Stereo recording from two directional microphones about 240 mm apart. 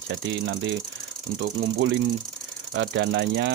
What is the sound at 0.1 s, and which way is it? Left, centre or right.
Speech, right.